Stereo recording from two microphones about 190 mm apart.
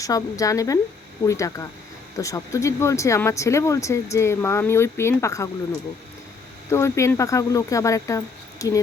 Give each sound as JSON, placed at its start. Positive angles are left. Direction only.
{"t": 0.0, "sound": "speech", "side_deg": 15}
{"t": 6.7, "sound": "speech", "side_deg": 15}